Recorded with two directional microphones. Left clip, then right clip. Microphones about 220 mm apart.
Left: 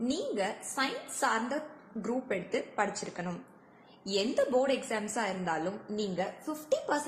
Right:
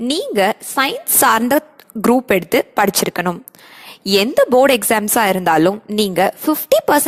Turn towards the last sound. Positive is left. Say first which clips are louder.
# right 18 dB
turn(degrees=-45)  # may be behind; listen again after turning